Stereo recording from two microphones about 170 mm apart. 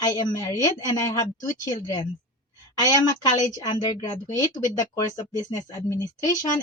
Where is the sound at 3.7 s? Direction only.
35° left (ahead or behind).